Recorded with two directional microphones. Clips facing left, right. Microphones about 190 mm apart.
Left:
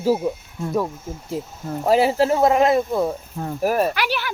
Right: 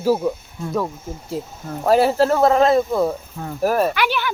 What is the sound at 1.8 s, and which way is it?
Speech, 15° left (ahead or behind).